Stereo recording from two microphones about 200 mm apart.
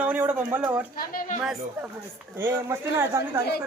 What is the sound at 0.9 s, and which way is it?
Speech, 45° left (ahead or behind).